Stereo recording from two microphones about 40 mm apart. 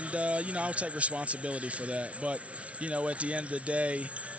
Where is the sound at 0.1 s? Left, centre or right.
Right.